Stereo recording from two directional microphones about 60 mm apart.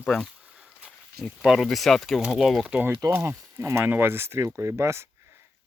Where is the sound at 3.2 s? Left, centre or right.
Right.